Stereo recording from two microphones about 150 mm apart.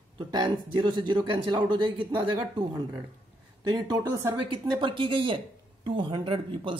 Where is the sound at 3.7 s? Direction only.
25° right (ahead or behind).